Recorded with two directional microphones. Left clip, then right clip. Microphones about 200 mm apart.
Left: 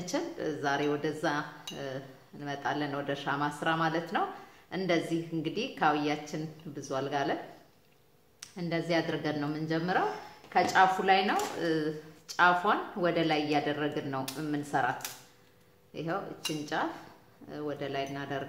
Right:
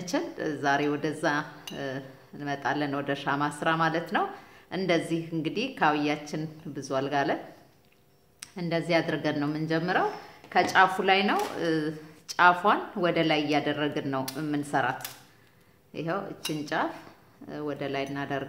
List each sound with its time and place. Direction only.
0.1 s speech: 45° right (ahead or behind)
8.4 s speech: 45° right (ahead or behind)